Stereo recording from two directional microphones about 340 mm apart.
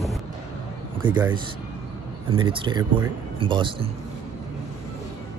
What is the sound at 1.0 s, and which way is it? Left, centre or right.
Speech, centre.